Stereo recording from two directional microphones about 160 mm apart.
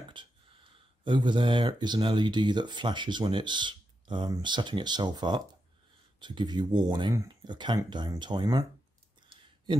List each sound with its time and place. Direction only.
0.1 s speech: 30° right (ahead or behind)